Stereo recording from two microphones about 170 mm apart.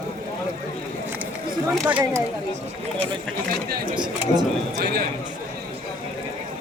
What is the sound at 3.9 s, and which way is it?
Speech, 25° right (ahead or behind).